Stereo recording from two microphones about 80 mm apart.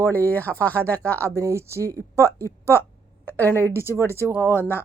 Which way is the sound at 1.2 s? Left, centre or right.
Right.